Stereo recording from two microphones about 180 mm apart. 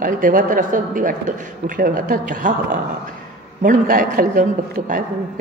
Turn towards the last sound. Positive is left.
turn(degrees=-50)  # may be behind; listen again after turning